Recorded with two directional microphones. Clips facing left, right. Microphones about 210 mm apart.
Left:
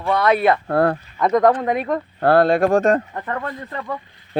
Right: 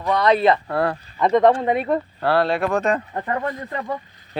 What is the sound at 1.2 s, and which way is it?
Speech, centre (ahead or behind).